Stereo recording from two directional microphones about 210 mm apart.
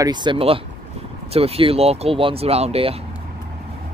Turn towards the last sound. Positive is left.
turn(degrees=-30)  # may be behind; listen again after turning